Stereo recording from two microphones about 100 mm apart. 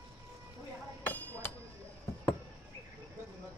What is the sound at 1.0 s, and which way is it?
Hammer, 20° left (ahead or behind).